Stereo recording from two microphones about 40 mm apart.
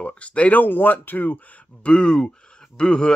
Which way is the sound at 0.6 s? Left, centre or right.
Left.